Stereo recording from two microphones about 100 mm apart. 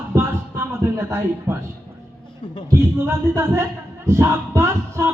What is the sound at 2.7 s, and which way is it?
A man's voice, 25° right (ahead or behind).